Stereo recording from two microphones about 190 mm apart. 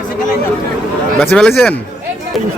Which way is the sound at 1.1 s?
5° left (ahead or behind).